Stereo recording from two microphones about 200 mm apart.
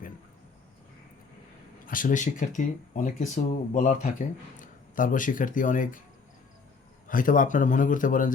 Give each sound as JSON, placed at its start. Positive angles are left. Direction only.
{"t": 1.9, "sound": "speech", "side_deg": 40}
{"t": 7.1, "sound": "speech", "side_deg": 45}